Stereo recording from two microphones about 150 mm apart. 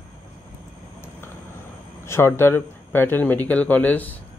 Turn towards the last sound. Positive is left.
turn(degrees=10)  # may be behind; listen again after turning